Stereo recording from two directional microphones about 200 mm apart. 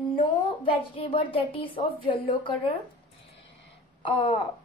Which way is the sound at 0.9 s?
25° left (ahead or behind).